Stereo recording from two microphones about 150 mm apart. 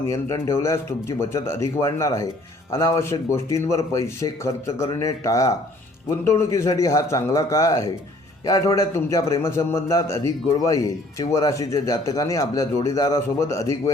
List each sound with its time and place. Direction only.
0.1 s a man's voice: 20° left (ahead or behind)